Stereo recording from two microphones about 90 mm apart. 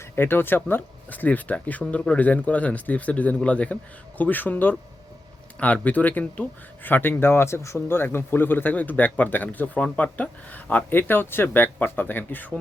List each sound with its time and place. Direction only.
0.0 s speech: 25° left (ahead or behind)